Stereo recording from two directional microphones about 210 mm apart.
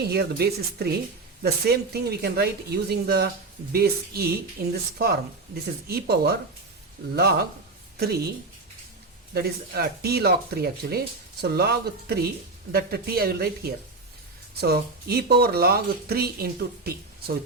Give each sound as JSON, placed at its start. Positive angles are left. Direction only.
{"t": 0.0, "sound": "speech", "side_deg": -50}
{"t": 5.9, "sound": "speech", "side_deg": -50}
{"t": 9.3, "sound": "speech", "side_deg": -45}